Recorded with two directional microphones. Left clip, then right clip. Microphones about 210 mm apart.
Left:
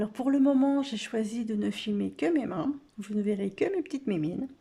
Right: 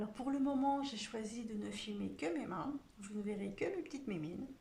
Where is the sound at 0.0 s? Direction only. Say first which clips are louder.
Left 13 dB; 40° left (ahead or behind).